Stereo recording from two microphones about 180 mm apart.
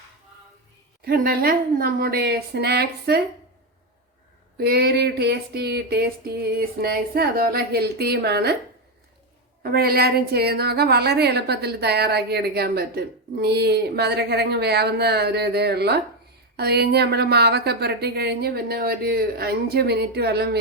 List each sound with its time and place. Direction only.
1.0 s a woman's voice: 55° right (ahead or behind)
4.5 s a woman's voice: 60° right (ahead or behind)
9.6 s a woman's voice: 60° right (ahead or behind)